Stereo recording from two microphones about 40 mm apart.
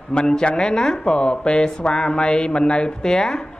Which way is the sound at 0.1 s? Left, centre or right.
Left.